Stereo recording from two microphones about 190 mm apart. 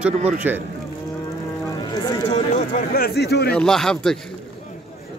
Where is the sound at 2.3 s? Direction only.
40° left (ahead or behind); by 3.5 s 60° left (ahead or behind).